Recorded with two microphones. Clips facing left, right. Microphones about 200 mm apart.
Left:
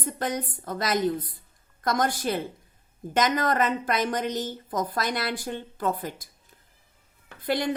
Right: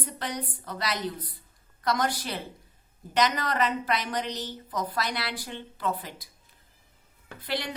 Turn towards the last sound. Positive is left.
turn(degrees=50)  # may be behind; listen again after turning